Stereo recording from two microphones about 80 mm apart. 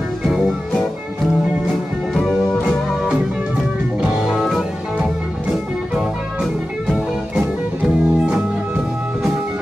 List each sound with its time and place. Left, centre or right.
4.2 s music: centre
6.9 s music: centre